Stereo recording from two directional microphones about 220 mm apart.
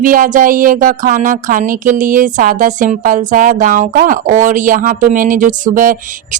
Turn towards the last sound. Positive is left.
turn(degrees=-40)  # may be behind; listen again after turning